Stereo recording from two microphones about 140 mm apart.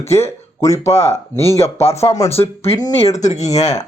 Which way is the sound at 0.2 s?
20° left (ahead or behind).